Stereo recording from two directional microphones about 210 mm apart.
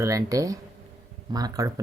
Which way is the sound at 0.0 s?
15° right (ahead or behind).